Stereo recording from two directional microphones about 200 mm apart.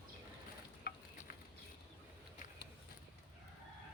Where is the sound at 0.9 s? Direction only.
50° left (ahead or behind).